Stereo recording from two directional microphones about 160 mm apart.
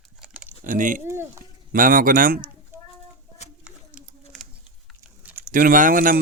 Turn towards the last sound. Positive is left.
turn(degrees=-60)  # may be behind; listen again after turning